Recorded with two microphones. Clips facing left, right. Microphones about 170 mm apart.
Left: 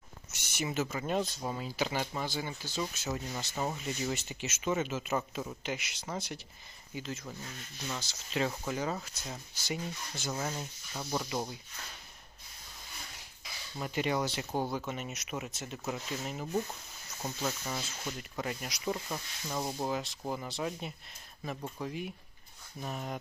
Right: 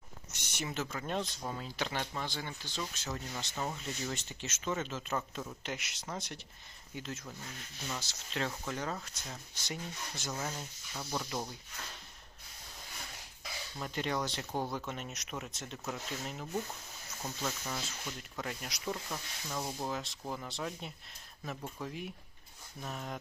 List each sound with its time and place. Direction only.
0.3 s speech: 5° left (ahead or behind)
13.7 s speech: 5° left (ahead or behind)
19.9 s speech: centre (ahead or behind)